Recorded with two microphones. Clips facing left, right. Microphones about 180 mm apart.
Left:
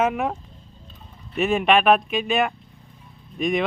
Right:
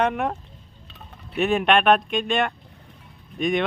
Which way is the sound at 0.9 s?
75° right (ahead or behind).